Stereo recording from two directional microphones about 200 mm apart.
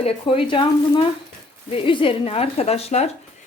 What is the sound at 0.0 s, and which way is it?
Speech, 30° left (ahead or behind).